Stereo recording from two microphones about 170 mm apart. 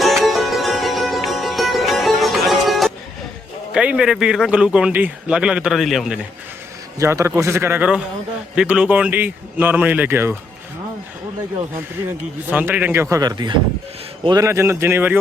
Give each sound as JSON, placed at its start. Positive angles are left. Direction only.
{"t": 0.0, "sound": "music", "side_deg": 0}
{"t": 3.7, "sound": "speech", "side_deg": -5}
{"t": 7.0, "sound": "speech", "side_deg": -15}
{"t": 12.5, "sound": "speech", "side_deg": -10}